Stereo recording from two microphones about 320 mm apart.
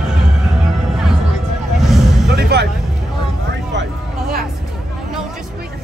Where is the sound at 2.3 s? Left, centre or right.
Right.